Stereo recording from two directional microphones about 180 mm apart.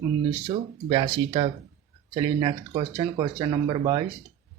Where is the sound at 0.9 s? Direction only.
30° right (ahead or behind).